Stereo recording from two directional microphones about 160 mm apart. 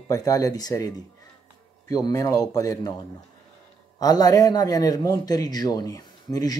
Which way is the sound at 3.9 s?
25° left (ahead or behind).